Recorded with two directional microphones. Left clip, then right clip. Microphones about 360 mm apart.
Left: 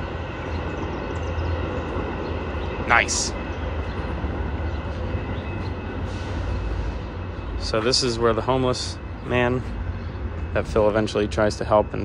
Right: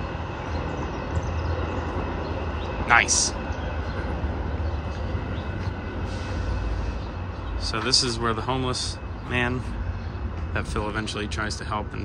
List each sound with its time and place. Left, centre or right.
2.9 s speech: centre
7.7 s speech: centre